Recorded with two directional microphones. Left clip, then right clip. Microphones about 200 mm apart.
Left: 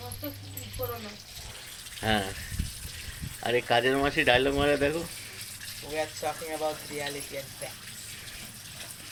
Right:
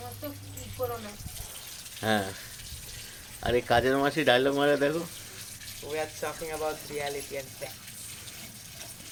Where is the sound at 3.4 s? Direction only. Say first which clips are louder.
Even; 20° right (ahead or behind).